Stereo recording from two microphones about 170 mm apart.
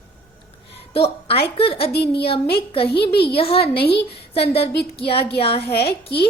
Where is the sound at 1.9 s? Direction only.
70° left (ahead or behind).